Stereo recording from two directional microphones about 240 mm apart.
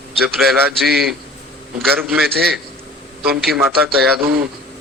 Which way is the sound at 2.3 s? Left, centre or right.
Right.